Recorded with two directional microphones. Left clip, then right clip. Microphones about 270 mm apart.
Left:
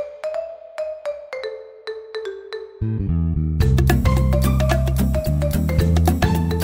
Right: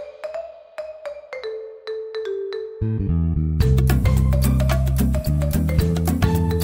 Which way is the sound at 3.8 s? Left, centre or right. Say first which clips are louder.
Left 4 dB; centre.